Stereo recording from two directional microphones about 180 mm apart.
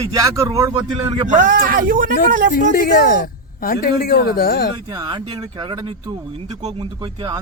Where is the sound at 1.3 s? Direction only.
45° right (ahead or behind).